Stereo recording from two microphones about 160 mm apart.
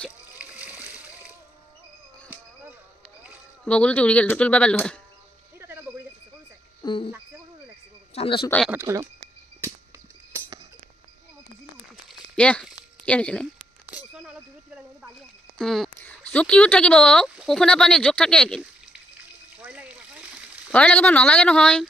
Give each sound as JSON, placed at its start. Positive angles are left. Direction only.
{"t": 0.4, "sound": "splash", "side_deg": -10}
{"t": 3.6, "sound": "speech", "side_deg": 5}
{"t": 5.6, "sound": "a sound", "side_deg": -15}
{"t": 6.8, "sound": "cricket", "side_deg": 30}
{"t": 8.1, "sound": "speech", "side_deg": 35}
{"t": 8.7, "sound": "speech", "side_deg": -15}
{"t": 12.1, "sound": "a sound", "side_deg": 5}
{"t": 13.0, "sound": "speech", "side_deg": 5}
{"t": 13.6, "sound": "a sound", "side_deg": -10}
{"t": 15.5, "sound": "speech", "side_deg": 0}
{"t": 19.5, "sound": "frying", "side_deg": -10}
{"t": 20.7, "sound": "speech", "side_deg": 10}